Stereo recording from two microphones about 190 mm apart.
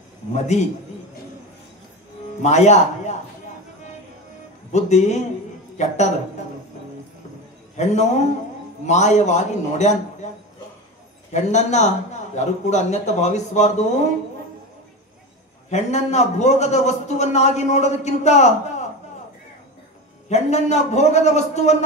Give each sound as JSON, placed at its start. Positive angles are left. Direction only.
{"t": 0.3, "sound": "a man's voice", "side_deg": 35}
{"t": 2.4, "sound": "speech", "side_deg": 35}
{"t": 4.7, "sound": "a man's voice", "side_deg": 35}
{"t": 7.7, "sound": "a man's voice", "side_deg": 35}
{"t": 11.3, "sound": "a man's voice", "side_deg": 35}
{"t": 15.7, "sound": "a man's voice", "side_deg": 35}
{"t": 20.2, "sound": "a man's voice", "side_deg": 35}